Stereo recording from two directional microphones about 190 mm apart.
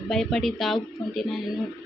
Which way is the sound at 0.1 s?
Centre (ahead or behind).